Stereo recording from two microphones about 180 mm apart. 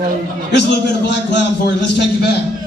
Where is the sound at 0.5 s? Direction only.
70° left (ahead or behind).